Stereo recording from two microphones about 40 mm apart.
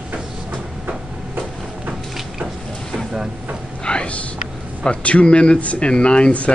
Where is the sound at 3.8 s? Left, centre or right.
Left.